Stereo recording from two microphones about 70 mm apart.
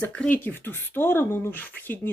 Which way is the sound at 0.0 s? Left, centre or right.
Left.